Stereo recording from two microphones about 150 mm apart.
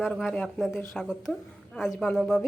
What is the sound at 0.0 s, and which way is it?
A woman's voice, centre (ahead or behind).